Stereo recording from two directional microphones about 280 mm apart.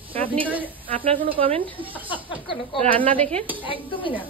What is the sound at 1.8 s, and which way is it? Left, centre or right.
A woman's voice, centre.